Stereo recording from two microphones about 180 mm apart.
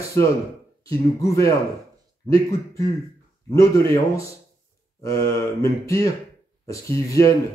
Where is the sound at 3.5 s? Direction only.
15° left (ahead or behind).